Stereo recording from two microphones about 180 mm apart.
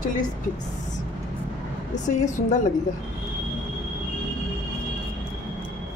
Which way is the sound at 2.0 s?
40° left (ahead or behind).